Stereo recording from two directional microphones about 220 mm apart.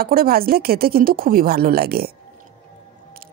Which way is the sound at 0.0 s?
45° right (ahead or behind).